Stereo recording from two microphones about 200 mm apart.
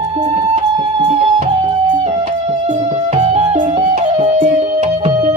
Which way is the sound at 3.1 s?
30° right (ahead or behind).